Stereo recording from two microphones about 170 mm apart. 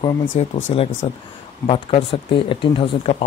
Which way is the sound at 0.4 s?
35° left (ahead or behind).